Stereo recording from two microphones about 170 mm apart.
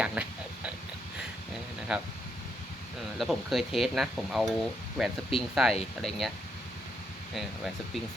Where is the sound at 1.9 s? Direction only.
5° right (ahead or behind).